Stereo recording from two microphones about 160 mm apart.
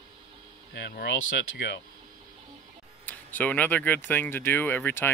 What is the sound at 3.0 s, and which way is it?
Speech, 10° left (ahead or behind).